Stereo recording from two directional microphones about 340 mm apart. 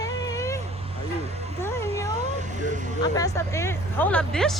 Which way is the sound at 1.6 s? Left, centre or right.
Centre.